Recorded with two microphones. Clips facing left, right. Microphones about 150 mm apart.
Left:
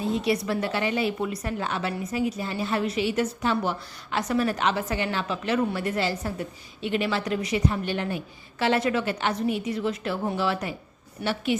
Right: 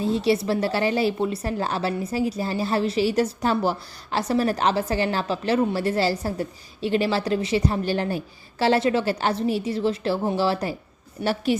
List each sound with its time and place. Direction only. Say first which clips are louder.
0.0 s a woman's voice: right 4 dB; 30° right (ahead or behind)